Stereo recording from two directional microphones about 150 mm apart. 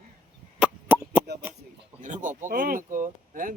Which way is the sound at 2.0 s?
55° right (ahead or behind).